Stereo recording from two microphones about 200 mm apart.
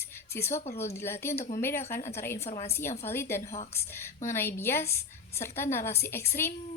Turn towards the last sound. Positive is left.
turn(degrees=15)  # may be behind; listen again after turning